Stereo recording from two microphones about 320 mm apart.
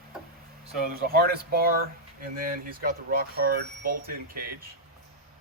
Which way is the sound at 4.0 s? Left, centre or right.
Right.